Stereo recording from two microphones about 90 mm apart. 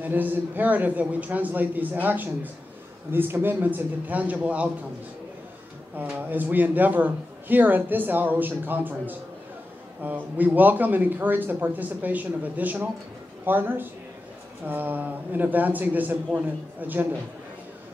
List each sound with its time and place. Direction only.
0.0 s a man's voice: 20° right (ahead or behind)
5.9 s a man's voice: 20° right (ahead or behind)